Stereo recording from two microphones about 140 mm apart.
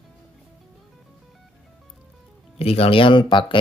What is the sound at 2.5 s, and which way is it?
Speech, 45° left (ahead or behind).